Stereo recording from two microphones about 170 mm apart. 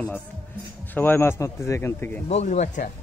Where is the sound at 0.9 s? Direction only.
10° left (ahead or behind).